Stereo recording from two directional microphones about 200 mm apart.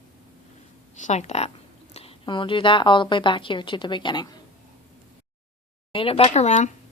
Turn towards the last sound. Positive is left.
turn(degrees=35)  # may be behind; listen again after turning